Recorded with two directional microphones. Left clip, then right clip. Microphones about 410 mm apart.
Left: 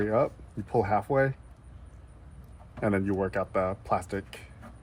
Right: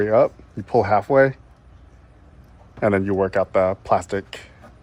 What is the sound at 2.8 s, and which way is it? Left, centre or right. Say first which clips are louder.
Speech: right 9 dB; right.